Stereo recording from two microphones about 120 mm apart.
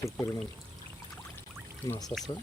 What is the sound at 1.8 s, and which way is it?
Speech, 25° left (ahead or behind).